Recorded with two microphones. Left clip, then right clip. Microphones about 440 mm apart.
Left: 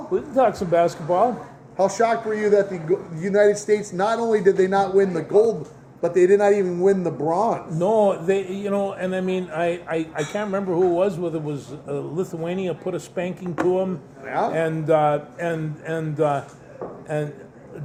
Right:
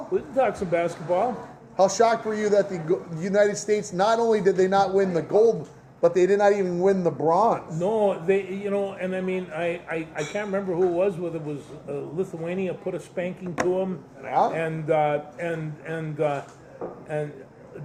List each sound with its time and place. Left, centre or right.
0.3 s speech: left
1.7 s a man's voice: right
7.8 s speech: left
14.3 s a man's voice: right
14.5 s speech: left